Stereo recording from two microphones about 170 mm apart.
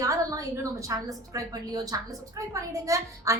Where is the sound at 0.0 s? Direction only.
20° right (ahead or behind).